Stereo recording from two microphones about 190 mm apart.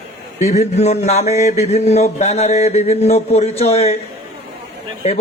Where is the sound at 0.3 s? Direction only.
35° left (ahead or behind).